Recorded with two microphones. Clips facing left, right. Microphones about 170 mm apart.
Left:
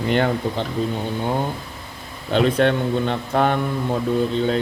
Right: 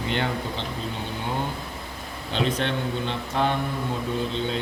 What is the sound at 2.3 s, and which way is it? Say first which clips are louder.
Speech: left 8 dB; 50° left (ahead or behind).